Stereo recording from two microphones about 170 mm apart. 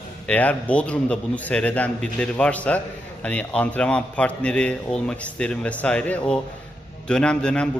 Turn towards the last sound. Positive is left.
turn(degrees=5)  # may be behind; listen again after turning